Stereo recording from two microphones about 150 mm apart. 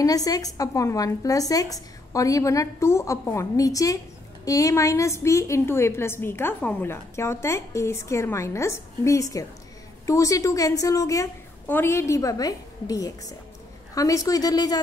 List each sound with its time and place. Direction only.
0.0 s a woman's voice: 25° left (ahead or behind)